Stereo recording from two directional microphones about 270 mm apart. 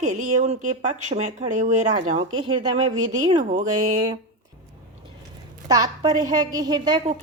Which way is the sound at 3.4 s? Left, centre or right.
Right.